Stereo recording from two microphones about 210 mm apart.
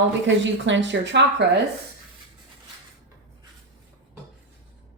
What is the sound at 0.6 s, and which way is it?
Speech, 60° right (ahead or behind).